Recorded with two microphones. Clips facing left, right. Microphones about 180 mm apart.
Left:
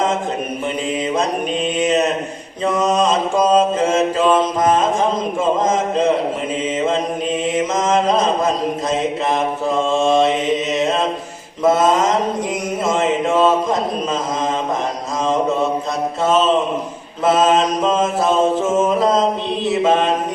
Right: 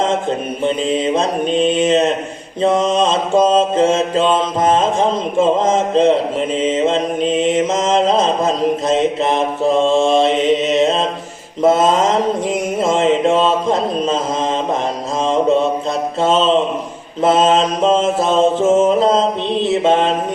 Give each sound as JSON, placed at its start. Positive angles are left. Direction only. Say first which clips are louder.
{"t": 0.6, "sound": "mantra", "louder": "right 7 dB", "side_deg": -30}
{"t": 16.2, "sound": "mantra", "louder": "right 2 dB", "side_deg": -30}